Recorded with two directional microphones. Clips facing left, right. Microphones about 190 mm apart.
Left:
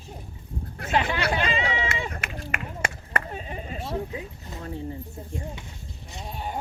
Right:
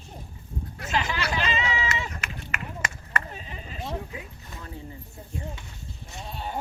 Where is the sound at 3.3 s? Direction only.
40° left (ahead or behind).